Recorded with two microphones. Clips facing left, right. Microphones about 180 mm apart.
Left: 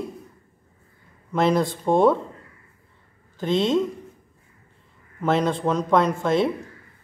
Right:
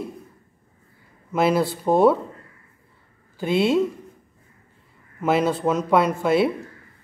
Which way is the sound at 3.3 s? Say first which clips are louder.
Right 1 dB; 10° right (ahead or behind).